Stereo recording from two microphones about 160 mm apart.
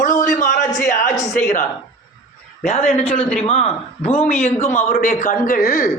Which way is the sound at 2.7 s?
45° left (ahead or behind).